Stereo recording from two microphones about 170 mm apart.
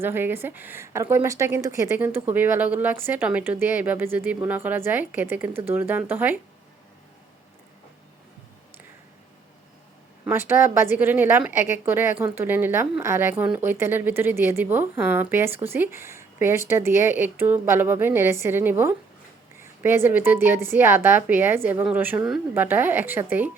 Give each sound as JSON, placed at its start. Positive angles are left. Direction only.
{"t": 0.0, "sound": "a woman's voice", "side_deg": -15}
{"t": 10.2, "sound": "a woman's voice", "side_deg": -15}